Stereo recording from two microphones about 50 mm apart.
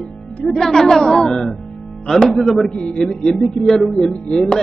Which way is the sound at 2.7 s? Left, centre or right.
Left.